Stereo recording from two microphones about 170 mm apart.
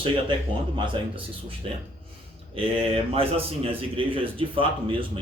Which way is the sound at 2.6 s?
35° right (ahead or behind).